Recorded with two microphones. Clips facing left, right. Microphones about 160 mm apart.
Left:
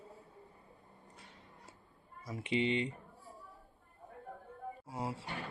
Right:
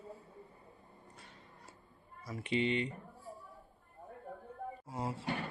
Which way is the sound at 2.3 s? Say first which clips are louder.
Even; 20° left (ahead or behind).